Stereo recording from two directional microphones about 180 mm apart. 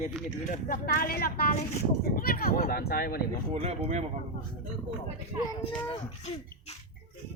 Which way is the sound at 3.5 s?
35° right (ahead or behind).